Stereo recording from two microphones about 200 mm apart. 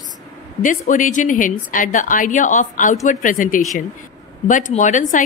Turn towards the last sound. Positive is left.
turn(degrees=40)  # may be behind; listen again after turning